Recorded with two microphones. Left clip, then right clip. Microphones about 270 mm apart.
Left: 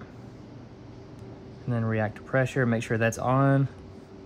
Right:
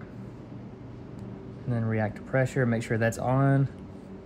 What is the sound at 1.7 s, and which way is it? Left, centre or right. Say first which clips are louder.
Speech: left 1 dB; centre.